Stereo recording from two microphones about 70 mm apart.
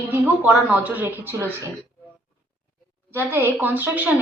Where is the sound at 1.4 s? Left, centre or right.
Right.